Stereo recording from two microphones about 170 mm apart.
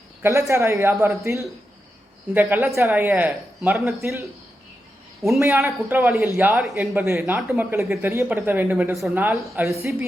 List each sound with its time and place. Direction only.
0.2 s speech: 15° right (ahead or behind)
5.4 s speech: 15° right (ahead or behind)
6.1 s speech: 5° right (ahead or behind)
6.7 s speech: 15° right (ahead or behind)